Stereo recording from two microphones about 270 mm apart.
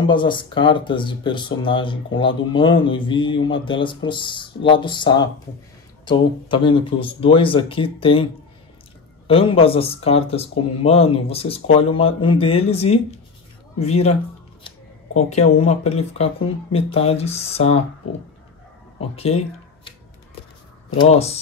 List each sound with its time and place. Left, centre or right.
0.0 s speech: centre
9.3 s speech: centre
15.1 s speech: left
18.9 s speech: left
21.0 s speech: left